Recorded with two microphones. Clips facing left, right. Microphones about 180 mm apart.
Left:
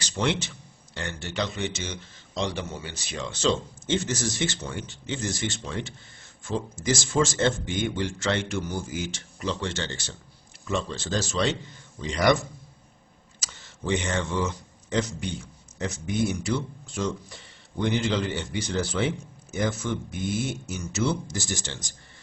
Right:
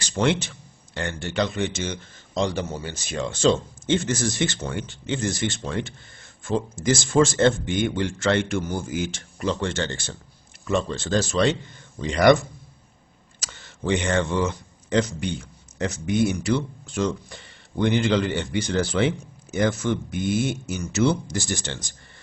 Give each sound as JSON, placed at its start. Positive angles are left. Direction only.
{"t": 0.0, "sound": "a man's voice", "side_deg": -50}
{"t": 13.4, "sound": "speech", "side_deg": -60}